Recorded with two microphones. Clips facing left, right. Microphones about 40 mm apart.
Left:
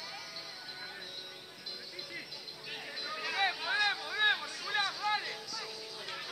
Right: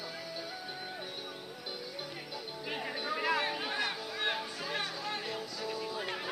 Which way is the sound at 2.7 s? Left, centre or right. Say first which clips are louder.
Right 5 dB; right.